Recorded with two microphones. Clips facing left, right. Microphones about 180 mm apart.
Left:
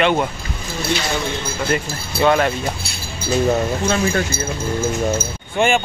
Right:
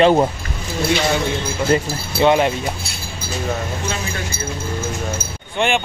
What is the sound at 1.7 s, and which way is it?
Speech, 20° right (ahead or behind).